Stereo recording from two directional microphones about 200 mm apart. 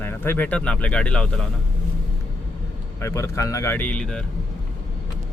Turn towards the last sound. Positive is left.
turn(degrees=5)  # may be behind; listen again after turning